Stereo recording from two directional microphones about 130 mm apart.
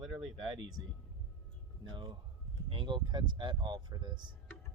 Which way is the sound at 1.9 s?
40° right (ahead or behind).